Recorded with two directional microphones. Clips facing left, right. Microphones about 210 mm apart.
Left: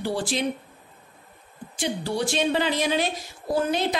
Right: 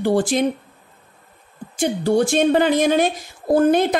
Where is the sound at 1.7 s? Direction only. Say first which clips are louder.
Right 9 dB; 50° right (ahead or behind).